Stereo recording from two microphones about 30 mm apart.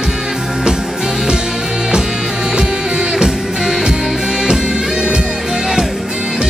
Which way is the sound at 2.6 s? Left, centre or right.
Right.